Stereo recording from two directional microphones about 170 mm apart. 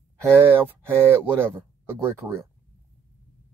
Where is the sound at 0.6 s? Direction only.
15° right (ahead or behind).